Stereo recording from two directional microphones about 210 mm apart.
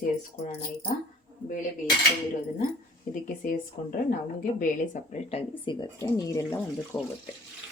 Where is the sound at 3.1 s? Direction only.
40° left (ahead or behind).